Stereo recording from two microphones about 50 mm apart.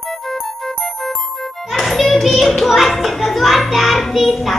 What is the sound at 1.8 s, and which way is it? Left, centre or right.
A child's voice, centre.